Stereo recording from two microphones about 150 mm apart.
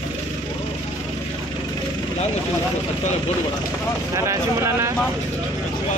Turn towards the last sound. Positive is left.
turn(degrees=-20)  # may be behind; listen again after turning